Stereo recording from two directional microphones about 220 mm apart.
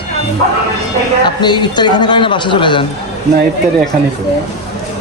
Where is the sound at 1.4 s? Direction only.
20° left (ahead or behind).